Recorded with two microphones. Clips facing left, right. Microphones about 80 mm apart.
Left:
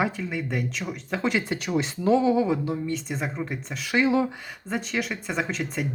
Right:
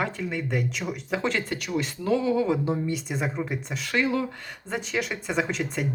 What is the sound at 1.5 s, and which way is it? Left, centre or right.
Speech, left.